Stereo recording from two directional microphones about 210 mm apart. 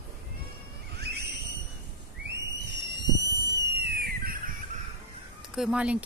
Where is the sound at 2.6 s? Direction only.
55° right (ahead or behind).